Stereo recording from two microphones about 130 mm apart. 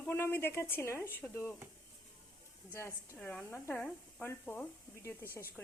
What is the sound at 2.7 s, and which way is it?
Speech, 20° left (ahead or behind).